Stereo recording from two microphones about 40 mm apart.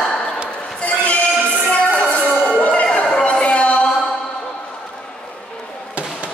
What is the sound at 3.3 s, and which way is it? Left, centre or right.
Music, left.